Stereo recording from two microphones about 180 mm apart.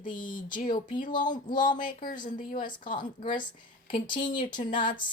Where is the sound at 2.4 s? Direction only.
50° left (ahead or behind).